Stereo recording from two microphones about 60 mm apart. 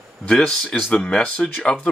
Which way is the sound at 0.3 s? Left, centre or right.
Centre.